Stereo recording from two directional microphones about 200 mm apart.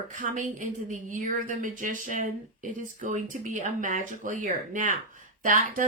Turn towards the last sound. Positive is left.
turn(degrees=-40)  # may be behind; listen again after turning